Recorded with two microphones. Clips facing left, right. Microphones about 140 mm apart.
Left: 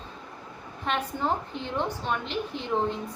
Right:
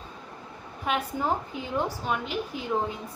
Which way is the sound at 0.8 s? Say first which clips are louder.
Right 1 dB; 10° right (ahead or behind).